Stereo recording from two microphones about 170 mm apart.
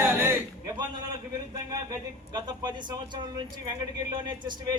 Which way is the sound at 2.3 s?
25° right (ahead or behind).